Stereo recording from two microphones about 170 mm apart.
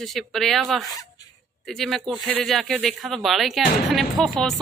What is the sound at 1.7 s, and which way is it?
A woman's voice, centre (ahead or behind).